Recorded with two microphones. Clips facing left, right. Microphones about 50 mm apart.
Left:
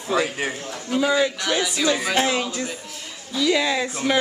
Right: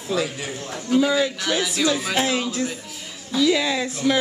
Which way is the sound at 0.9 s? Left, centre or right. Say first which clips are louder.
Right 1 dB; centre.